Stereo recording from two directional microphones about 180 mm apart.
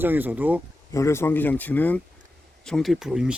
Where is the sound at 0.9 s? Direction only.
15° left (ahead or behind).